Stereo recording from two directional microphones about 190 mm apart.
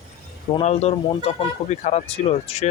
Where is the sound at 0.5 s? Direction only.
35° left (ahead or behind).